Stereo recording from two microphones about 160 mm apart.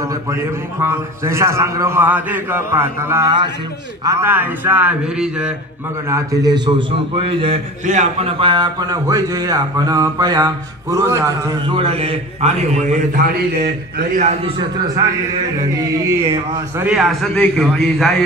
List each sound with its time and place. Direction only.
0.1 s a man's voice: 15° right (ahead or behind)
3.3 s speech: 30° right (ahead or behind)
4.0 s a man's voice: 15° right (ahead or behind)
6.0 s speech: 20° right (ahead or behind)
7.8 s speech: 50° right (ahead or behind); by 11.5 s 20° right (ahead or behind)
11.7 s a man's voice: 35° right (ahead or behind)
13.1 s a man's voice: 70° right (ahead or behind)
14.1 s a man's voice: 45° right (ahead or behind)
16.8 s a man's voice: 5° right (ahead or behind)